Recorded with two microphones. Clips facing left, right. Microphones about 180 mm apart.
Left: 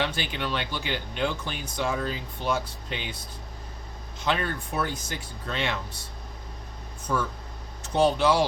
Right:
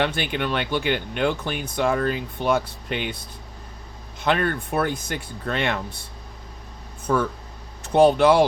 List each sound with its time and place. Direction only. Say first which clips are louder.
0.0 s speech: right 5 dB; 60° right (ahead or behind)
4.2 s speech: right 6 dB; 60° right (ahead or behind)
7.1 s speech: right 6 dB; 60° right (ahead or behind)